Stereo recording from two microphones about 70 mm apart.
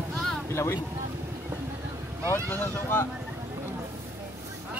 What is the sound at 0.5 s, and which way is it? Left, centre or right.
Speech, left.